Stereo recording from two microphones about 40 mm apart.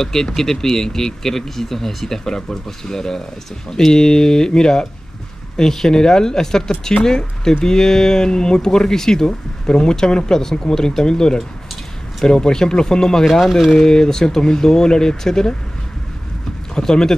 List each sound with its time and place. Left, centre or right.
0.0 s speech: centre
13.3 s speech: centre
16.7 s speech: centre